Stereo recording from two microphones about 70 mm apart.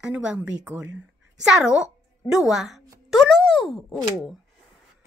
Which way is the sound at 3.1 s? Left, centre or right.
Centre.